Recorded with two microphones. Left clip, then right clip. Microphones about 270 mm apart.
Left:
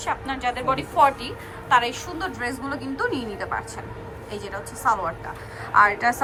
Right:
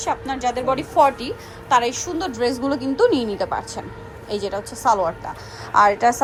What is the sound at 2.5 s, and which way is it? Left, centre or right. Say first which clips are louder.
A woman's voice: right 7 dB; centre.